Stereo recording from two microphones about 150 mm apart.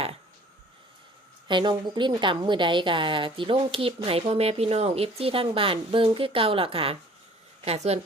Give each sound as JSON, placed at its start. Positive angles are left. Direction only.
{"t": 1.5, "sound": "a woman's voice", "side_deg": -30}